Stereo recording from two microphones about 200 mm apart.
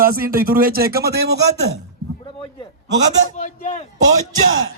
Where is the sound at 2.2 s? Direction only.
25° left (ahead or behind).